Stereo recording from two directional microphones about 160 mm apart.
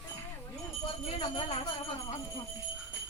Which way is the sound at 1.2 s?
35° left (ahead or behind).